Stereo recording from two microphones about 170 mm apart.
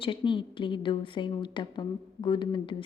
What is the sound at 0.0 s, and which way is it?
A woman's voice, 30° left (ahead or behind).